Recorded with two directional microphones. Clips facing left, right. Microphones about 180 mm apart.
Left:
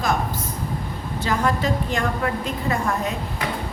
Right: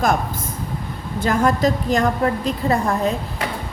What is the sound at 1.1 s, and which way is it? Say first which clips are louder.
A woman's voice: right 5 dB; 45° right (ahead or behind).